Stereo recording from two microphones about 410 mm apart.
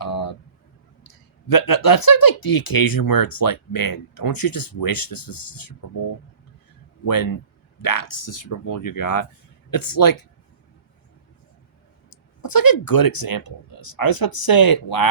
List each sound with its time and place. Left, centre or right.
0.0 s a sound: left
1.0 s speech: left
7.0 s speech: left
12.1 s speech: left